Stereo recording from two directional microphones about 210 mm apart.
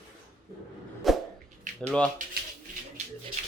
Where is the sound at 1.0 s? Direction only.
Centre (ahead or behind).